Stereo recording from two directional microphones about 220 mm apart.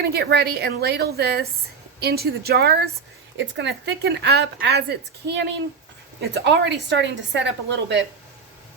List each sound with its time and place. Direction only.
0.0 s speech: 45° right (ahead or behind)